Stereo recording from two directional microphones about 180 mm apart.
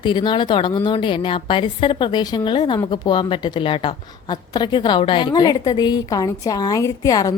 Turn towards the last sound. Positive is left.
turn(degrees=20)  # may be behind; listen again after turning